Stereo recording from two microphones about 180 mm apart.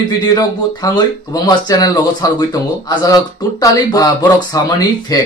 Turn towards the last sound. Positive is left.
turn(degrees=20)  # may be behind; listen again after turning